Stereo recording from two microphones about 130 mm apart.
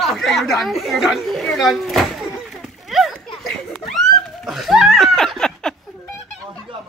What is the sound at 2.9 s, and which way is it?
Children playing, centre (ahead or behind).